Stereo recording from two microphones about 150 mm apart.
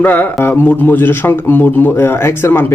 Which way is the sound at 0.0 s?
10° left (ahead or behind).